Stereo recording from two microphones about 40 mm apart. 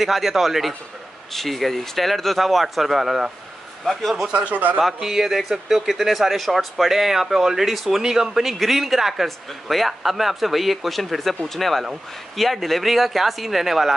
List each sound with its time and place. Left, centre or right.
0.0 s speech: centre
4.3 s speech: right
4.7 s a man's voice: centre
8.0 s speech: centre